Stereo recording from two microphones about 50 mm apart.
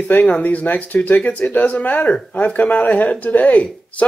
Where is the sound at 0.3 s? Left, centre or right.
Left.